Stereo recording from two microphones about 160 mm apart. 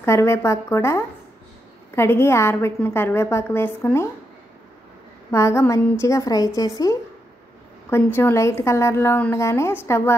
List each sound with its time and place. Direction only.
0.0 s a woman's voice: 15° left (ahead or behind)
5.3 s a woman's voice: 15° left (ahead or behind)